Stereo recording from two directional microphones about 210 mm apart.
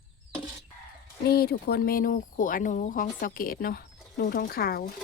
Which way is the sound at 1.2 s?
50° left (ahead or behind).